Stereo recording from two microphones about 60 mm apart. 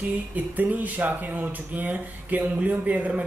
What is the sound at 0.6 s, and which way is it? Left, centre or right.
Speech, right.